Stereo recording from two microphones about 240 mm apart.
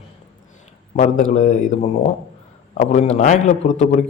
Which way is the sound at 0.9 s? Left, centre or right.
Left.